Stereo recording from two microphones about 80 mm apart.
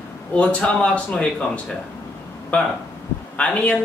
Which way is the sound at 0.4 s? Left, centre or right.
Centre.